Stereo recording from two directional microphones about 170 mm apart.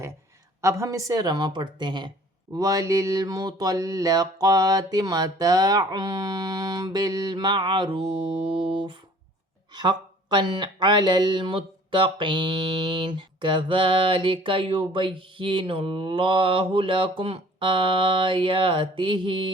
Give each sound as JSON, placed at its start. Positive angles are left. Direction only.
{"t": 0.6, "sound": "speech", "side_deg": -15}